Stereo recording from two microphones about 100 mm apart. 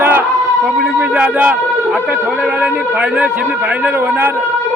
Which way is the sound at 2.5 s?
15° right (ahead or behind).